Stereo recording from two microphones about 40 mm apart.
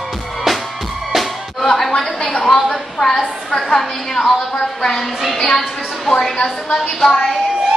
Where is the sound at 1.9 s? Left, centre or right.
Left.